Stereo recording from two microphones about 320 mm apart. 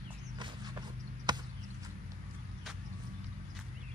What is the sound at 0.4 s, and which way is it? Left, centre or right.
Walk, centre.